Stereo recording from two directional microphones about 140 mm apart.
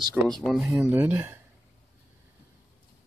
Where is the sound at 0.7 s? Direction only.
15° right (ahead or behind).